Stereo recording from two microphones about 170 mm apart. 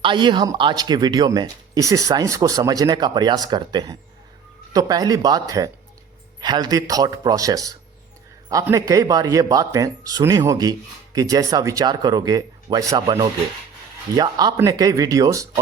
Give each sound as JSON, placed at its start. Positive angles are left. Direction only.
{"t": 0.0, "sound": "speech", "side_deg": -30}